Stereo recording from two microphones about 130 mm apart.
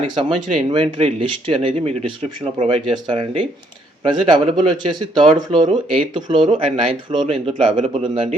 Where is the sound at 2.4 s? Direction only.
25° right (ahead or behind).